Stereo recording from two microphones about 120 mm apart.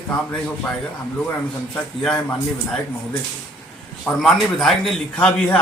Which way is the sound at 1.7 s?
5° left (ahead or behind).